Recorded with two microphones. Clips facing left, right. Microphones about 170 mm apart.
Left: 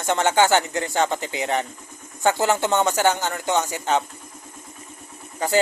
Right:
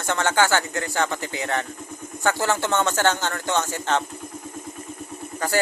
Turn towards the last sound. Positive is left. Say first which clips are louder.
# left 3 dB
turn(degrees=20)  # may be behind; listen again after turning